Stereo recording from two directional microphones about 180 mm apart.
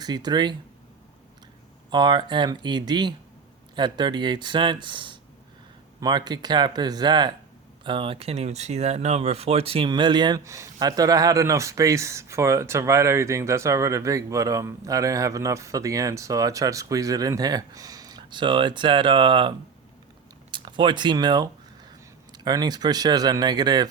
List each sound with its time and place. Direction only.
0.0 s speech: 25° right (ahead or behind)
1.9 s speech: 25° right (ahead or behind)